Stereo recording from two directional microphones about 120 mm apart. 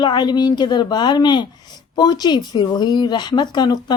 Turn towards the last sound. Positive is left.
turn(degrees=35)  # may be behind; listen again after turning